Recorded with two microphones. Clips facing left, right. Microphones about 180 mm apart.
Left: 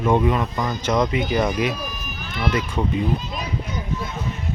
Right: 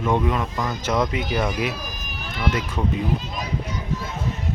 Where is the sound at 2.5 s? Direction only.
Centre (ahead or behind).